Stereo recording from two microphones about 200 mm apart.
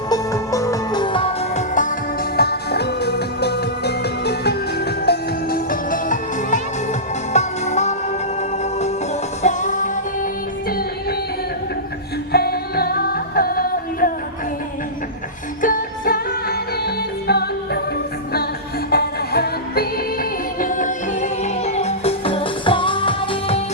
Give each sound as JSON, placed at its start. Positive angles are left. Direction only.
{"t": 0.1, "sound": "music", "side_deg": 15}
{"t": 2.3, "sound": "music", "side_deg": 50}
{"t": 9.4, "sound": "music", "side_deg": 35}
{"t": 12.3, "sound": "music", "side_deg": 50}
{"t": 15.6, "sound": "music", "side_deg": 45}
{"t": 18.9, "sound": "music", "side_deg": 50}
{"t": 20.6, "sound": "music", "side_deg": 40}